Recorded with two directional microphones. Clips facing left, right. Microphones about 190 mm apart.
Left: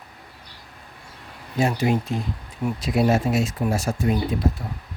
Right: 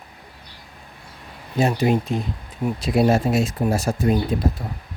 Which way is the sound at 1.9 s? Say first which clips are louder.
Right 2 dB; 20° right (ahead or behind).